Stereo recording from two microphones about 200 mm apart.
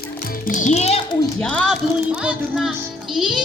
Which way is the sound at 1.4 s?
5° left (ahead or behind).